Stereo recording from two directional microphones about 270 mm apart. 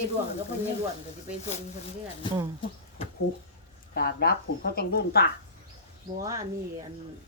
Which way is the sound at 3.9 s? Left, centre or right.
Left.